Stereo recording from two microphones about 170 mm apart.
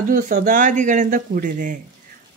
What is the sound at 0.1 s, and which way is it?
Speech, 50° right (ahead or behind).